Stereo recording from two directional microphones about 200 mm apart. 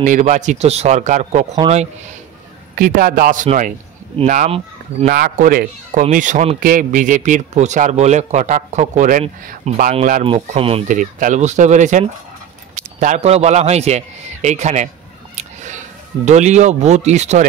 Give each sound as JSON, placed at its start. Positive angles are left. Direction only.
{"t": 0.0, "sound": "a man's voice", "side_deg": -40}
{"t": 2.7, "sound": "a man's voice", "side_deg": -45}
{"t": 5.0, "sound": "a man's voice", "side_deg": -45}
{"t": 15.3, "sound": "a sound", "side_deg": -35}
{"t": 16.3, "sound": "a man's voice", "side_deg": -35}